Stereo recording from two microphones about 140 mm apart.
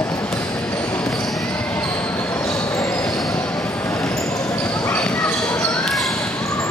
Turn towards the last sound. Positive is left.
turn(degrees=5)  # may be behind; listen again after turning